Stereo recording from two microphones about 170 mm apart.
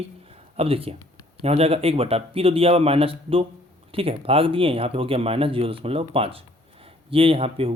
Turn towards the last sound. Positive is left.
turn(degrees=-35)  # may be behind; listen again after turning